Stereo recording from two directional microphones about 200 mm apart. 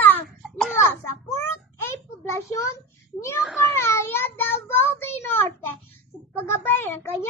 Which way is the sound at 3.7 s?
10° left (ahead or behind).